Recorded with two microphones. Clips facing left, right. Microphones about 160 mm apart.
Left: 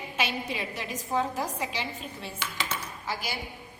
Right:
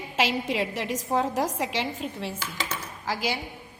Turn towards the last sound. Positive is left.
turn(degrees=-90)